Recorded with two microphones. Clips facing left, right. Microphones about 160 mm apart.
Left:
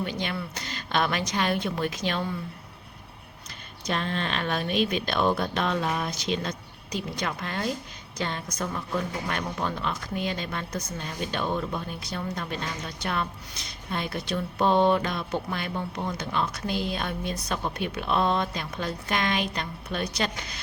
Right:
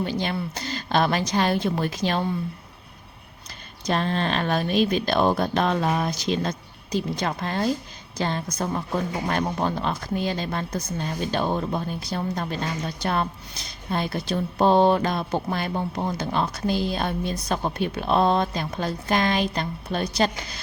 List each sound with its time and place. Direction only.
0.0 s speech: 35° right (ahead or behind)
3.8 s speech: 35° right (ahead or behind)